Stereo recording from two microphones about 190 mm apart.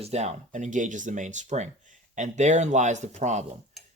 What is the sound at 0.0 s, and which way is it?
Speech, 35° right (ahead or behind).